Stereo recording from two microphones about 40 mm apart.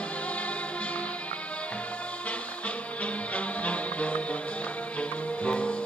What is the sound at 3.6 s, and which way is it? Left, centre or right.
Music, left.